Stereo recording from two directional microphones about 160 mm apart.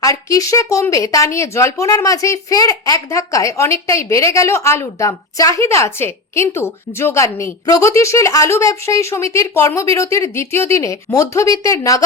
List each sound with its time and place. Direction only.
0.0 s a woman's voice: 20° left (ahead or behind)